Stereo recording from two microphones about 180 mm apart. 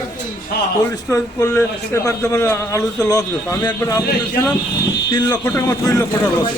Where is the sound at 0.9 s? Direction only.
20° left (ahead or behind).